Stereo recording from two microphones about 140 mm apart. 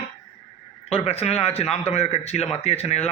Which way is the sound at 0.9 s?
45° left (ahead or behind).